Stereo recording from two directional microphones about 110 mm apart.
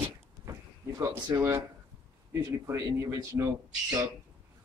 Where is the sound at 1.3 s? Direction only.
25° right (ahead or behind).